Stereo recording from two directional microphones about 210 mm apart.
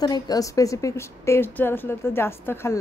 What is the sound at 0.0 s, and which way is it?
Speech, 20° left (ahead or behind).